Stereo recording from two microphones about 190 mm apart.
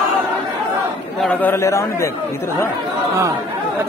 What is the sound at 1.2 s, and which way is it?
Speech, 10° left (ahead or behind).